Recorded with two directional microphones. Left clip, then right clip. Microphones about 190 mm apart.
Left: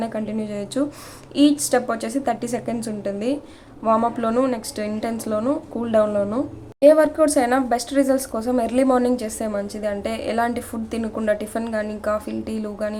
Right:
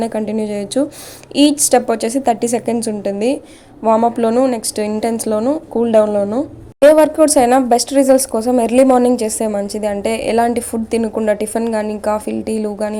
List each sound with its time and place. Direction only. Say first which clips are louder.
0.0 s speech: right 8 dB; 30° right (ahead or behind)
6.8 s speech: right 5 dB; 35° right (ahead or behind)